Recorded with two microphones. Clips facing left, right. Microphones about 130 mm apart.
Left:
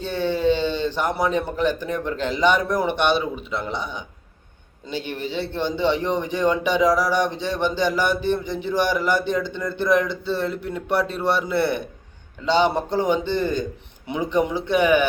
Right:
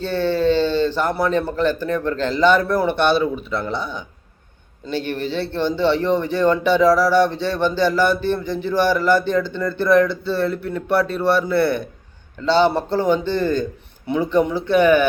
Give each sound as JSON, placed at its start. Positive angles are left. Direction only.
{"t": 0.0, "sound": "speech", "side_deg": 15}